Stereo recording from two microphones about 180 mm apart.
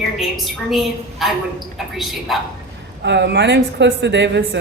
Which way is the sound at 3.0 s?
70° right (ahead or behind).